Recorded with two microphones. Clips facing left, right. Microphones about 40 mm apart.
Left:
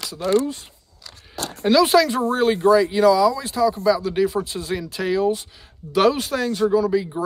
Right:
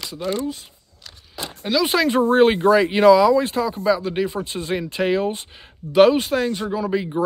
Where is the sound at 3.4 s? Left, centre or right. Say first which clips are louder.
Left 2 dB; right.